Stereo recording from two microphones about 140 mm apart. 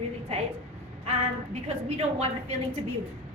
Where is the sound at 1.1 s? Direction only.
50° right (ahead or behind).